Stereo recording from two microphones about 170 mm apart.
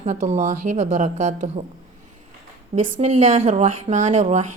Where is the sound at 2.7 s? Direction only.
45° right (ahead or behind).